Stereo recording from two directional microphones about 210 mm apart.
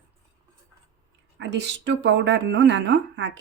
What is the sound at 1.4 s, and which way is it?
A woman's voice, 55° right (ahead or behind).